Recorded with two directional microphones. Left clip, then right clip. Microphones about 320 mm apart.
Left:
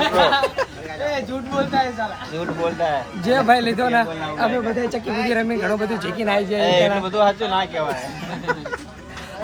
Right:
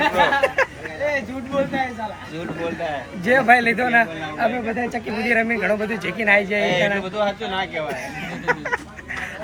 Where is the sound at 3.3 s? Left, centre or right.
Centre.